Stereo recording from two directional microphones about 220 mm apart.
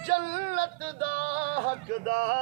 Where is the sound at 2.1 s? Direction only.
35° right (ahead or behind).